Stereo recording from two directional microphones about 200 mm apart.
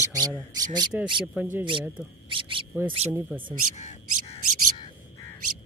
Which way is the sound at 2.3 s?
25° right (ahead or behind).